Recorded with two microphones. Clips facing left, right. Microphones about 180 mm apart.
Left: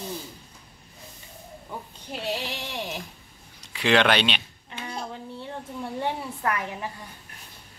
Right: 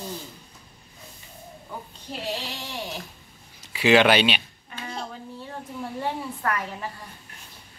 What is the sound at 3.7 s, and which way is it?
Speech, 5° right (ahead or behind).